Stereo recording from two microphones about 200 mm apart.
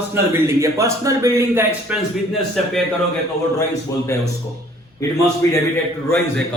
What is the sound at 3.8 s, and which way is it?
Speech, 15° left (ahead or behind).